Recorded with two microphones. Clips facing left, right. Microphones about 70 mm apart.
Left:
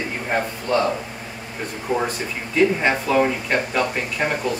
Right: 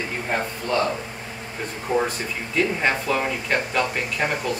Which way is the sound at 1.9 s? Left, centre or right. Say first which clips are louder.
Even; centre.